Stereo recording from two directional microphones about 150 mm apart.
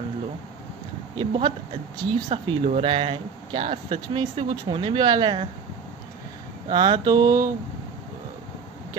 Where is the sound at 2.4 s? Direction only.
45° right (ahead or behind).